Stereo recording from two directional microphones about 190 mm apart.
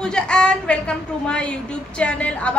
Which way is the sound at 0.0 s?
5° left (ahead or behind).